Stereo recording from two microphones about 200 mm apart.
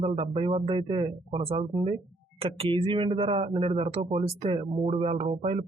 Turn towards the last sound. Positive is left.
turn(degrees=-30)  # may be behind; listen again after turning